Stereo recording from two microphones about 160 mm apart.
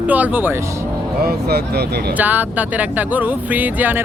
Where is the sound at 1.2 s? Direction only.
85° right.